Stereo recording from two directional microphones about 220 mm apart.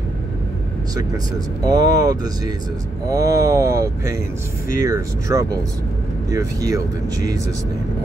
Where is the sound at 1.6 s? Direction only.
15° right (ahead or behind).